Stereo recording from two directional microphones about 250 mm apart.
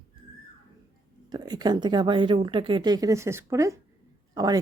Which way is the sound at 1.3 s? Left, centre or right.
Centre.